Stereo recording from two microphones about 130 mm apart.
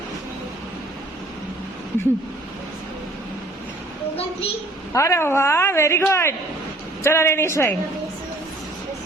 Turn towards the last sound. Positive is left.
turn(degrees=20)  # may be behind; listen again after turning